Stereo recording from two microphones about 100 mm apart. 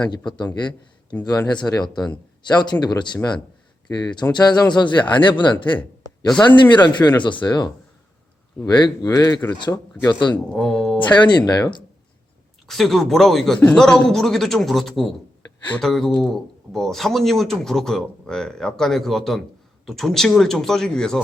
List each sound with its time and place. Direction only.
1.2 s a man's voice: 40° left (ahead or behind)
10.3 s speech: 5° left (ahead or behind)
11.1 s speech: 45° left (ahead or behind)
12.6 s speech: centre (ahead or behind)